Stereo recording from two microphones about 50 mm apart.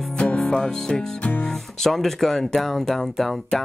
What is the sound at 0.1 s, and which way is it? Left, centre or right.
Music, centre.